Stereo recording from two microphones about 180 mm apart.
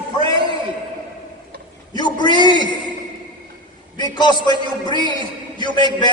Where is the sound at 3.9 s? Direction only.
25° left (ahead or behind).